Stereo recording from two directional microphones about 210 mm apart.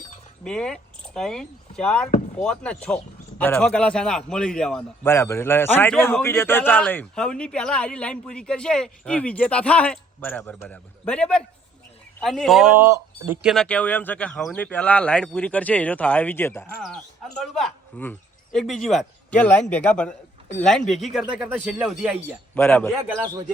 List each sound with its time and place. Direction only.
0.4 s speech: 5° left (ahead or behind)
22.5 s speech: 10° left (ahead or behind)
23.2 s speech: 20° right (ahead or behind)